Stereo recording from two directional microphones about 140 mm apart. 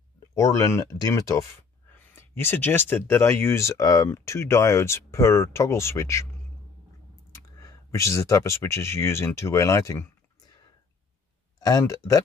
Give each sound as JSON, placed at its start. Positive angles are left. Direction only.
{"t": 0.3, "sound": "speech", "side_deg": 25}
{"t": 7.3, "sound": "speech", "side_deg": 20}
{"t": 11.6, "sound": "speech", "side_deg": 25}